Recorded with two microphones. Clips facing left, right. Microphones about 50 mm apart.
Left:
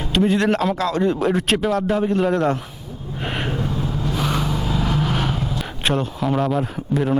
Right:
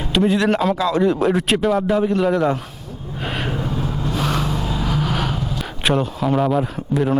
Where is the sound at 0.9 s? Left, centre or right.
Centre.